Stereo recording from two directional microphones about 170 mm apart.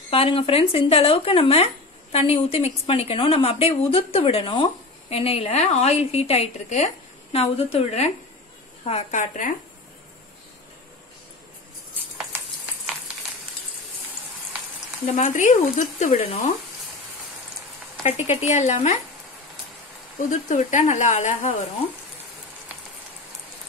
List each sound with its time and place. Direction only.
0.1 s a woman's voice: 35° left (ahead or behind)
15.1 s speech: 45° left (ahead or behind)
18.0 s a woman's voice: 40° left (ahead or behind)
20.2 s speech: 45° left (ahead or behind)